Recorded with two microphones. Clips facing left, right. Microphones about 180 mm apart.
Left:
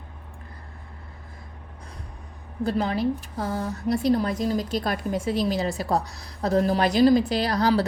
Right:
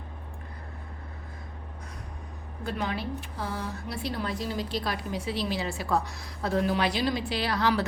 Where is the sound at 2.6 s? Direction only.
35° left (ahead or behind).